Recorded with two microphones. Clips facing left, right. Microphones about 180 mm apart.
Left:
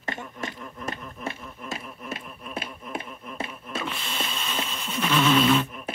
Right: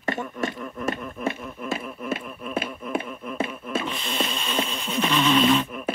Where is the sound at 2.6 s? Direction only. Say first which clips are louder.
Right 7 dB; 60° right (ahead or behind).